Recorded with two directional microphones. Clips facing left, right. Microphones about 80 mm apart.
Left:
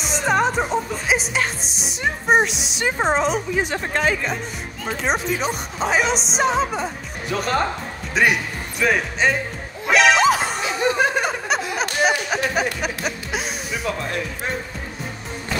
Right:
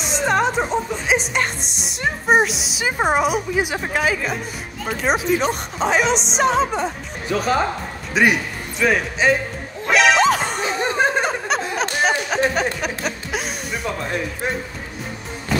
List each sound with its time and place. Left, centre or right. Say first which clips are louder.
0.0 s speech: right 1 dB; centre
9.8 s music: even; centre
10.6 s laughter: even; right
11.2 s snicker: right 1 dB; centre
11.7 s a sound: even; centre
12.8 s music: right 1 dB; centre